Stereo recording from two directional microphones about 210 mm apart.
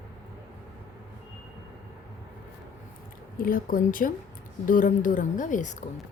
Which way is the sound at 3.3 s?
40° left (ahead or behind).